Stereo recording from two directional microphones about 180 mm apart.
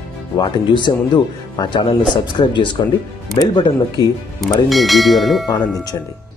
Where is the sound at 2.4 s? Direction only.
30° left (ahead or behind).